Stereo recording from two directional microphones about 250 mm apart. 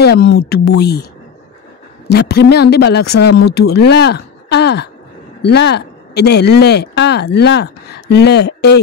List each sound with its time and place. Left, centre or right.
0.0 s speech: left
2.0 s speech: left